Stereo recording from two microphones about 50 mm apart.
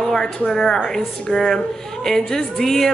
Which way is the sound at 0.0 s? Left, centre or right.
Centre.